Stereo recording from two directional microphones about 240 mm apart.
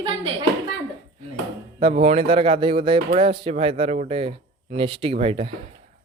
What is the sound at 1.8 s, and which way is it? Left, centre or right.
Speech, right.